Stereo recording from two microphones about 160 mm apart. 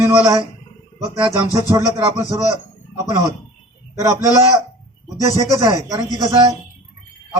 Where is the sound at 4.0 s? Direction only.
20° right (ahead or behind).